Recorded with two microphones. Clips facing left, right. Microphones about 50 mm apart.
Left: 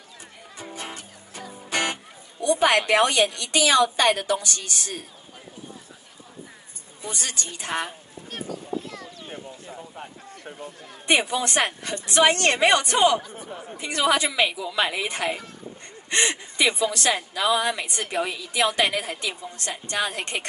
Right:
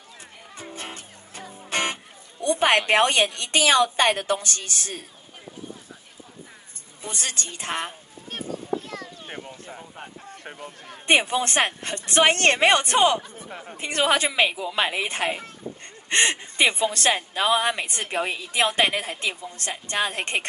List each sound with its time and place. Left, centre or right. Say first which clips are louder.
0.7 s music: left 2 dB; right
2.4 s a woman's voice: even; right
7.0 s a woman's voice: even; right
8.8 s a sound: right 2 dB; right
10.3 s a woman's voice: even; right